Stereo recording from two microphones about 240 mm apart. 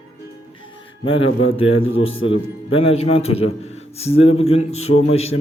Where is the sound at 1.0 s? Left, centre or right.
Left.